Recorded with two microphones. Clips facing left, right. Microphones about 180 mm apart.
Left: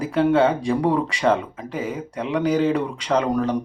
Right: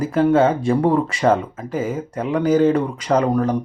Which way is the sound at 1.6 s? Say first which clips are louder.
Right 4 dB; 5° right (ahead or behind).